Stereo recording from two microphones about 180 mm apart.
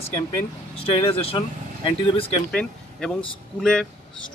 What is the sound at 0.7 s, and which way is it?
Speech, 30° left (ahead or behind).